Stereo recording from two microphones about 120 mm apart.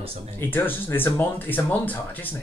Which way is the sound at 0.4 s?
15° left (ahead or behind).